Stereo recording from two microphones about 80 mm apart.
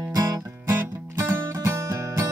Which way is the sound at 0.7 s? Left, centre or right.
Right.